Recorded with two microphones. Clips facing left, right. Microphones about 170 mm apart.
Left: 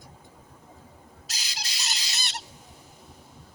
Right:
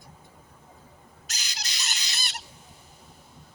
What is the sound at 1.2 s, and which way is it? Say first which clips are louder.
Chicken: left 1 dB; 30° left (ahead or behind).